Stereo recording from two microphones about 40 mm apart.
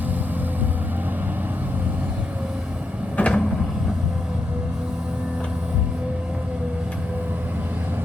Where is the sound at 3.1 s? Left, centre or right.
Left.